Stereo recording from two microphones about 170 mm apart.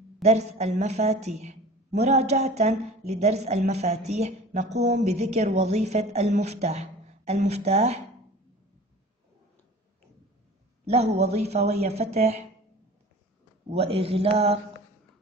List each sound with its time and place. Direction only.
0.2 s speech: 40° right (ahead or behind)
10.9 s speech: 40° right (ahead or behind)
13.7 s speech: 35° right (ahead or behind)